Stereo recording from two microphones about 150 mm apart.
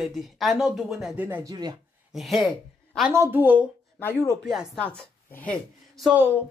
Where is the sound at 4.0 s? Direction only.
15° left (ahead or behind).